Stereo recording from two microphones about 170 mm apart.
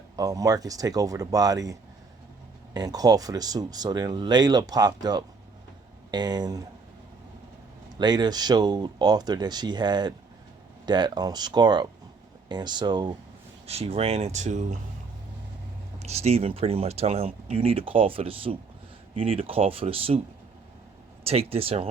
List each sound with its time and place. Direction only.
0.2 s speech: 20° right (ahead or behind)
7.9 s speech: 25° right (ahead or behind)
13.7 s speech: 35° right (ahead or behind)
16.0 s speech: 40° right (ahead or behind)
21.2 s speech: 35° right (ahead or behind)